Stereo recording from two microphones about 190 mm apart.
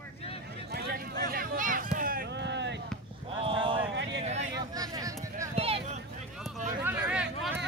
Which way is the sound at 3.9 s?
70° right (ahead or behind).